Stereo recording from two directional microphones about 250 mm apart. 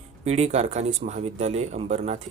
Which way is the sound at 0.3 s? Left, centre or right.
Right.